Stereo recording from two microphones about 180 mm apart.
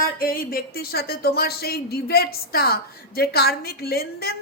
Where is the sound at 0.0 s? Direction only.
55° left (ahead or behind).